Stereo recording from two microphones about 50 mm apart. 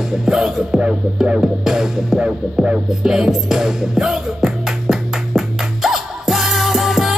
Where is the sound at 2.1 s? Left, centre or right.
Right.